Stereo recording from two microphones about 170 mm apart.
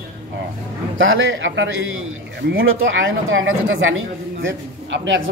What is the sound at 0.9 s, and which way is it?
A man's voice, 90° right.